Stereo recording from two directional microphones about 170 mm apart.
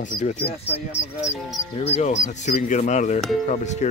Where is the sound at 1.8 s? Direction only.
40° left (ahead or behind).